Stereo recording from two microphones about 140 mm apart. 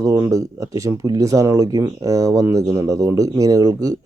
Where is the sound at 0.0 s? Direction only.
20° right (ahead or behind).